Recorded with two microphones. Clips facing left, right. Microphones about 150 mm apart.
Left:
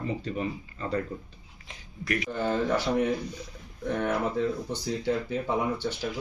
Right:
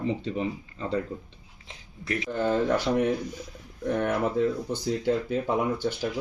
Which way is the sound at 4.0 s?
15° right (ahead or behind).